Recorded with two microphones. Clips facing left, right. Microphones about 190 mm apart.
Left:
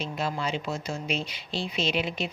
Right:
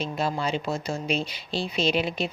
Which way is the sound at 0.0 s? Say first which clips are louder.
Right 3 dB; 35° right (ahead or behind).